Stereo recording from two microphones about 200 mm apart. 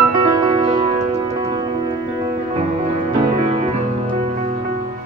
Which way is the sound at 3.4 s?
30° right (ahead or behind).